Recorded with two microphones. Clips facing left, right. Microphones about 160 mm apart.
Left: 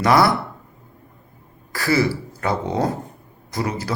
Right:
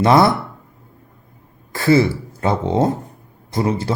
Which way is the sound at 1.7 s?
25° right (ahead or behind).